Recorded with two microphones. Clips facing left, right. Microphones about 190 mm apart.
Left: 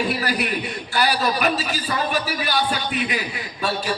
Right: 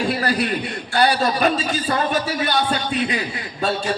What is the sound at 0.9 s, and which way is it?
A man's voice, 25° right (ahead or behind).